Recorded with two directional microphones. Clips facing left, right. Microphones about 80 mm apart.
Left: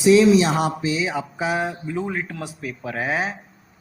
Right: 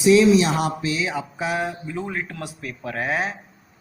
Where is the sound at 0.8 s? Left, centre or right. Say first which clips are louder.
Left 2 dB; centre.